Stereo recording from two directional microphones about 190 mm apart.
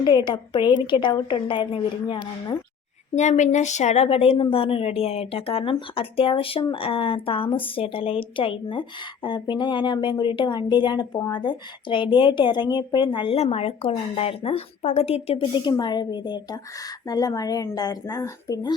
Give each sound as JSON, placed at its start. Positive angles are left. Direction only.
{"t": 0.0, "sound": "speech", "side_deg": 20}
{"t": 3.2, "sound": "speech", "side_deg": 40}